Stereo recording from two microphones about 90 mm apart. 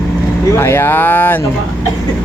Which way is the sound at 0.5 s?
25° left (ahead or behind).